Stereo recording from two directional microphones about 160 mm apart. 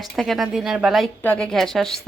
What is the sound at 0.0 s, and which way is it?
A woman's voice, centre (ahead or behind).